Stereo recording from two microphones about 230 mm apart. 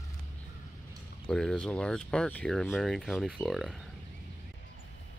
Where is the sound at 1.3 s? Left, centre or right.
Centre.